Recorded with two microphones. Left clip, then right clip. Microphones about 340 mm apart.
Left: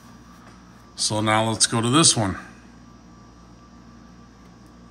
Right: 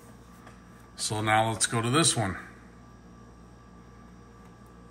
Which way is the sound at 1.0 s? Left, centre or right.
Centre.